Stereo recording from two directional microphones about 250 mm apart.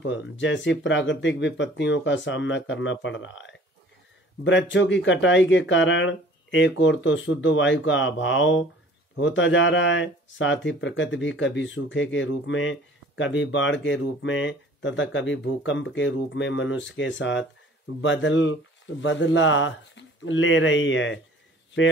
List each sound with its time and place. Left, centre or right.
0.4 s speech: left